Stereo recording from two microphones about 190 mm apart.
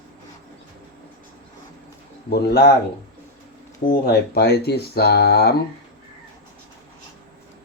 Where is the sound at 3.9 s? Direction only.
55° left (ahead or behind).